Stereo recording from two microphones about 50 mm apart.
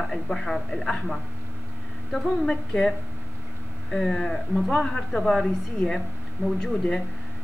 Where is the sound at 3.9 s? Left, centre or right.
Centre.